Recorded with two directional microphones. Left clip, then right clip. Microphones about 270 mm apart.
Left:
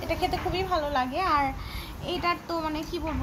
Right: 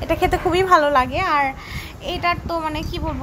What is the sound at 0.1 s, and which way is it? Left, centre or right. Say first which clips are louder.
A woman's voice: right 10 dB; centre.